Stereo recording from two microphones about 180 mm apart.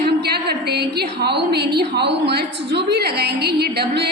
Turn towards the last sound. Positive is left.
turn(degrees=-65)  # may be behind; listen again after turning